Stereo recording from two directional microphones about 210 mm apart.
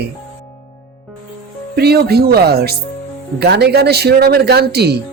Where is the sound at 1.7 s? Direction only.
50° right (ahead or behind).